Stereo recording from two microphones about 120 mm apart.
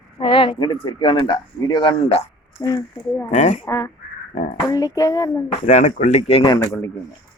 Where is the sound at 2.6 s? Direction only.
25° left (ahead or behind).